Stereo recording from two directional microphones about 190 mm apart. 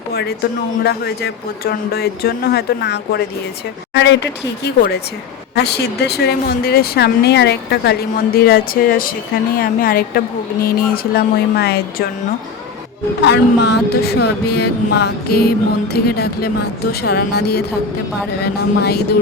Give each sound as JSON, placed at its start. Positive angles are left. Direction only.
{"t": 0.1, "sound": "speech", "side_deg": 55}
{"t": 0.8, "sound": "music", "side_deg": 55}
{"t": 5.5, "sound": "speech", "side_deg": 60}
{"t": 13.2, "sound": "music", "side_deg": 65}